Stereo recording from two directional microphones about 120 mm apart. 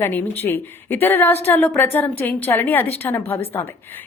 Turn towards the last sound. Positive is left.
turn(degrees=20)  # may be behind; listen again after turning